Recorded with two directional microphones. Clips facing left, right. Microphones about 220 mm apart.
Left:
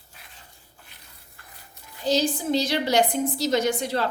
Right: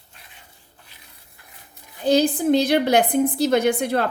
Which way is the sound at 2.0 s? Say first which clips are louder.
Right 6 dB; 55° right (ahead or behind).